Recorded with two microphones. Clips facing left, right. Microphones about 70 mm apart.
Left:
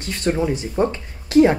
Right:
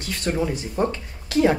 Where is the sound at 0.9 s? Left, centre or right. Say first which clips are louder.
Left 4 dB; left.